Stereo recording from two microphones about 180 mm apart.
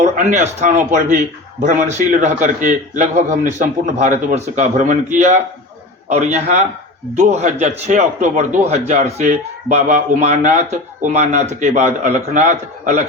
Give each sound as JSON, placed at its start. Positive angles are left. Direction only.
{"t": 0.0, "sound": "a man's voice", "side_deg": -40}